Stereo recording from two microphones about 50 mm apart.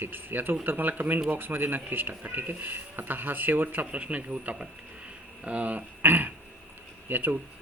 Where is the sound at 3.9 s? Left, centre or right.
Right.